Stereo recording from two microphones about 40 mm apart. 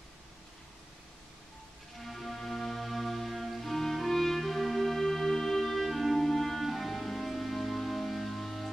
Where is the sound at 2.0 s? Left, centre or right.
Centre.